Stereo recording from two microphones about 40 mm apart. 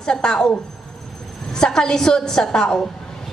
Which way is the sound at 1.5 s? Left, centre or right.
Centre.